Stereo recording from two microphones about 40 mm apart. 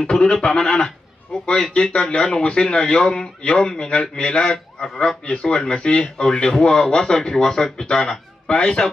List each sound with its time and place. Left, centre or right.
0.0 s a man's voice: left